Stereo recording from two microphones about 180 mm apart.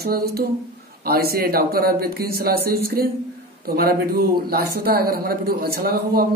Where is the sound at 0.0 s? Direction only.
60° right (ahead or behind).